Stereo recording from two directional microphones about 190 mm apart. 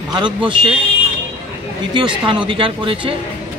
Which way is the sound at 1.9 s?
25° right (ahead or behind).